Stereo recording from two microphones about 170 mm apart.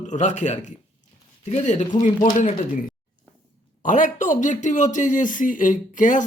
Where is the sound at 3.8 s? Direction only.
50° left (ahead or behind).